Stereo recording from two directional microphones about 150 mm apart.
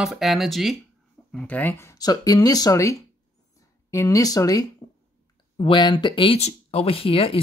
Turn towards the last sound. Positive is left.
turn(degrees=40)  # may be behind; listen again after turning